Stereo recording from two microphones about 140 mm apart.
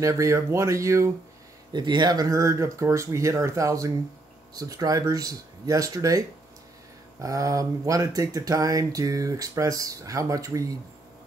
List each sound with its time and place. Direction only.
0.0 s speech: 20° right (ahead or behind)
1.7 s speech: 30° right (ahead or behind)